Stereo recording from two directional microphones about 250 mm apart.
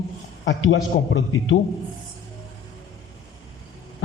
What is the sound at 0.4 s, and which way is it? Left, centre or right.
A man's voice, left.